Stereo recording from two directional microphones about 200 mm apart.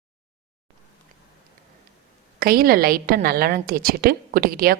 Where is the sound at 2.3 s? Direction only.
50° right (ahead or behind).